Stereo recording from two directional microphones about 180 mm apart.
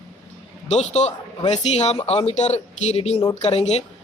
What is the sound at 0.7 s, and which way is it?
Speech, 40° left (ahead or behind).